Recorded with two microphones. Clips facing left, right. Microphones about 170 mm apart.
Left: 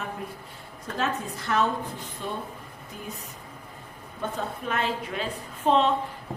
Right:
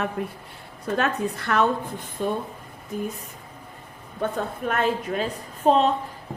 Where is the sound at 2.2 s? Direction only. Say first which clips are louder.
Right 8 dB; 50° right (ahead or behind).